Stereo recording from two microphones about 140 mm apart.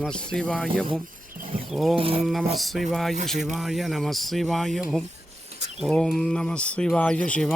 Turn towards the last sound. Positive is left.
turn(degrees=10)  # may be behind; listen again after turning